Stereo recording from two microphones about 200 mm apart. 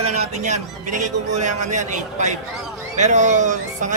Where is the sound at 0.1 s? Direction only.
35° right (ahead or behind).